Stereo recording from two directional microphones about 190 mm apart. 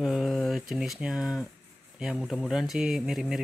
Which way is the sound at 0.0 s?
Centre (ahead or behind).